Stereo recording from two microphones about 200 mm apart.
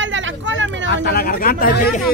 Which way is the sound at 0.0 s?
70° right (ahead or behind).